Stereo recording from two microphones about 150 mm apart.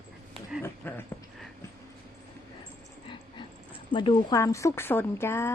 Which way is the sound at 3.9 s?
30° left (ahead or behind).